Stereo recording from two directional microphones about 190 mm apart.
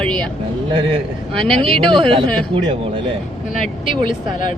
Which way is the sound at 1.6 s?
30° right (ahead or behind).